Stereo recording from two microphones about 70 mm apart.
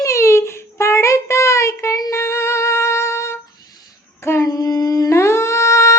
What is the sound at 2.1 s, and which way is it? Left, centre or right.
Music, left.